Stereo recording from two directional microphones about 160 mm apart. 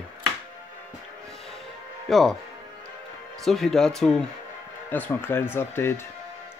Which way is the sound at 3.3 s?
Centre (ahead or behind).